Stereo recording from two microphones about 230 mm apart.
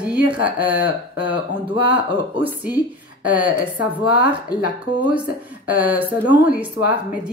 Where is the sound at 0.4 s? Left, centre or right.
Centre.